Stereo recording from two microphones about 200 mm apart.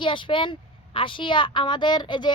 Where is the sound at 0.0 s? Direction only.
25° left (ahead or behind).